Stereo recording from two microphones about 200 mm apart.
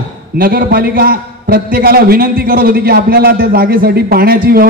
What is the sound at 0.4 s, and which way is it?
A man's voice, 45° right (ahead or behind).